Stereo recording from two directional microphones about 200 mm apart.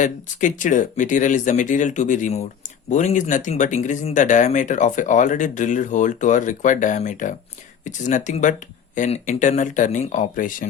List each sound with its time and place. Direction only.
0.0 s speech: 40° left (ahead or behind)